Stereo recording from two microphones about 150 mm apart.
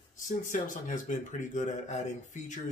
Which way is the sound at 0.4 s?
60° left (ahead or behind).